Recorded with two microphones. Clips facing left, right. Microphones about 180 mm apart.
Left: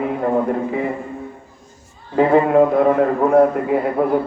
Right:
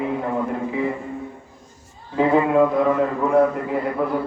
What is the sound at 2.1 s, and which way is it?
A man's voice, 55° left (ahead or behind).